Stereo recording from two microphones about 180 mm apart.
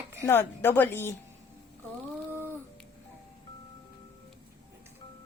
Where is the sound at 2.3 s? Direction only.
15° right (ahead or behind).